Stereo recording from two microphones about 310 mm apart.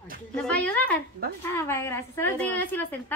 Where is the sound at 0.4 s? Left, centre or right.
Centre.